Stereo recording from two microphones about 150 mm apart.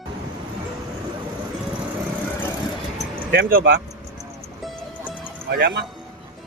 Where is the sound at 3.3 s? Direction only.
85° right.